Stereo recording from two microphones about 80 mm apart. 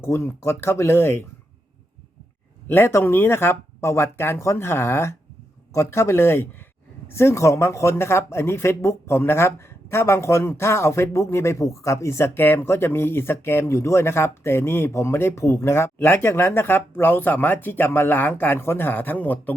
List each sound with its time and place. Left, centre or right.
0.0 s speech: left
2.6 s speech: left